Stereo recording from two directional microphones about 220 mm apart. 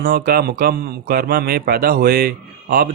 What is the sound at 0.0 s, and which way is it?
A man's voice, 45° right (ahead or behind).